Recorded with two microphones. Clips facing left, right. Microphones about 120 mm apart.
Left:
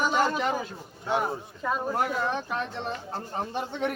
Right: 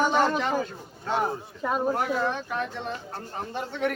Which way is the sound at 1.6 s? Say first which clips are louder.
Right 2 dB; 20° right (ahead or behind).